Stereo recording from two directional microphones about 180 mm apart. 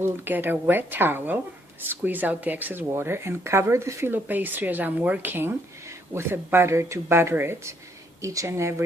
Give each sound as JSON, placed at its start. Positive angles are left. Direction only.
{"t": 0.0, "sound": "speech", "side_deg": -10}